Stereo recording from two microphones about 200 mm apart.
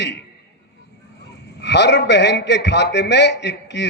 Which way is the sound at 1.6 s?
60° left (ahead or behind).